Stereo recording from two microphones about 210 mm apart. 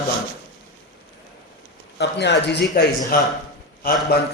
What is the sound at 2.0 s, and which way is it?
A man's voice, 55° left (ahead or behind).